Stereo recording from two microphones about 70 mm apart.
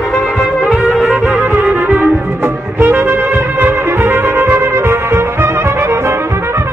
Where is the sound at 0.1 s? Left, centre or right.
Centre.